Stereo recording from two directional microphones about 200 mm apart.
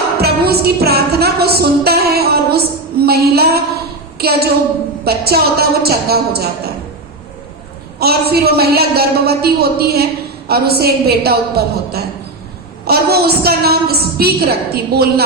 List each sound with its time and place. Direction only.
0.2 s a woman's voice: 50° right (ahead or behind)
7.9 s a woman's voice: 50° right (ahead or behind)